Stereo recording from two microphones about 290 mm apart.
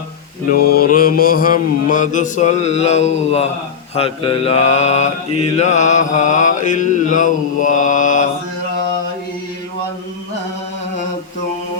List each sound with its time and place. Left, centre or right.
0.5 s mantra: left